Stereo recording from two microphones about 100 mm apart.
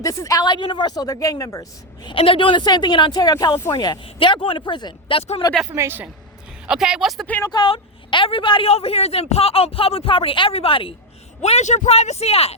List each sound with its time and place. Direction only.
0.0 s a woman's voice: 35° left (ahead or behind)
0.4 s a woman's voice: 50° left (ahead or behind); by 1.6 s 35° left (ahead or behind)
2.0 s speech: 65° left (ahead or behind); by 4.0 s 45° left (ahead or behind)
4.0 s speech: 55° left (ahead or behind)
5.7 s speech: 30° right (ahead or behind)
6.7 s speech: 5° right (ahead or behind)
7.4 s speech: 45° left (ahead or behind)
7.7 s a woman's voice: 65° left (ahead or behind)
8.6 s speech: 85° left; by 10.9 s 65° left (ahead or behind)
11.4 s a man's voice: 90° left